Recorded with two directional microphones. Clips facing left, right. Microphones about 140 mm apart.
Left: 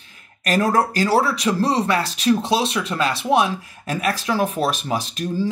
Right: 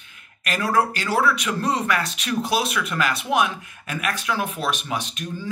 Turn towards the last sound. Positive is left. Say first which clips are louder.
# left 8 dB
turn(degrees=35)  # may be behind; listen again after turning